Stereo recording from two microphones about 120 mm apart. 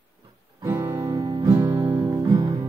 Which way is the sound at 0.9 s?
25° right (ahead or behind).